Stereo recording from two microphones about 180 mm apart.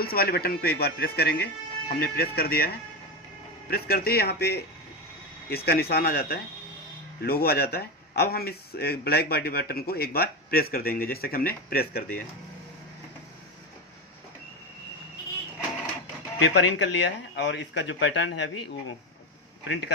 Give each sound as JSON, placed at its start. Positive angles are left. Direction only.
{"t": 0.0, "sound": "speech", "side_deg": 60}
{"t": 3.7, "sound": "speech", "side_deg": 60}
{"t": 5.7, "sound": "speech", "side_deg": 60}
{"t": 16.3, "sound": "speech", "side_deg": 80}
{"t": 19.6, "sound": "speech", "side_deg": 70}